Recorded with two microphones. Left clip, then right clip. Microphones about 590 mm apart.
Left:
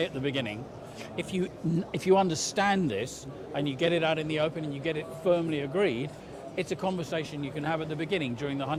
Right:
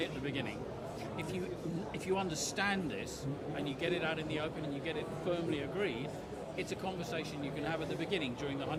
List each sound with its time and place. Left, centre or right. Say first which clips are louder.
0.0 s a man's voice: left 8 dB; left